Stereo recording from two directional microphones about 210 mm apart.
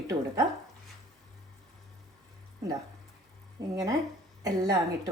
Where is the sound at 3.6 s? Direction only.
15° right (ahead or behind).